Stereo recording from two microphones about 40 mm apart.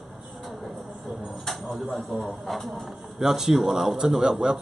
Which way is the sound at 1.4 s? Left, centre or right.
Centre.